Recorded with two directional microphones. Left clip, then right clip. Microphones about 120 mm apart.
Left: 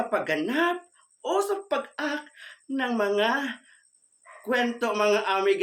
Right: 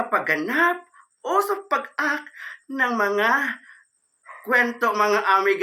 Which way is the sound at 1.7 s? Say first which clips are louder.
Right 5 dB; 40° left (ahead or behind).